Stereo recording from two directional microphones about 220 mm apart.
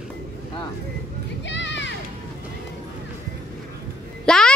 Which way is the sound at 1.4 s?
55° left (ahead or behind).